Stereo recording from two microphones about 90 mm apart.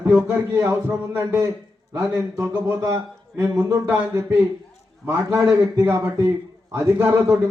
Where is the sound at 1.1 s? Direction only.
30° right (ahead or behind).